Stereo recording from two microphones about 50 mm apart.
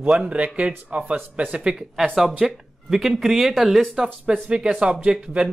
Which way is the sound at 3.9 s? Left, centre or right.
Centre.